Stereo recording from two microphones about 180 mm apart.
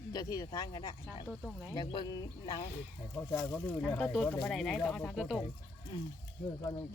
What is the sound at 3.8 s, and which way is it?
Speech, 5° left (ahead or behind).